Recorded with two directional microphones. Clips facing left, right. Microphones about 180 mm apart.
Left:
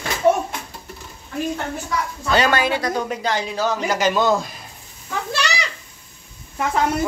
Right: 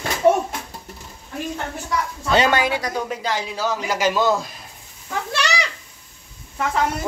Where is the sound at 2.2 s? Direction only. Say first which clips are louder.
Even; 20° right (ahead or behind).